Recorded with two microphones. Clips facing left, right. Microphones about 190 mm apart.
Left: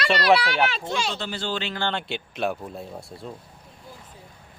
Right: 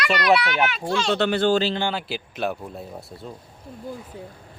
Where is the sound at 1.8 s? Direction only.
10° right (ahead or behind).